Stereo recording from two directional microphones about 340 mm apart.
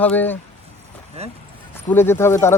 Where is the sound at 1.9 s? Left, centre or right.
Centre.